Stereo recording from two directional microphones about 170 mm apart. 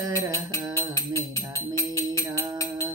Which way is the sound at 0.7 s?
15° left (ahead or behind).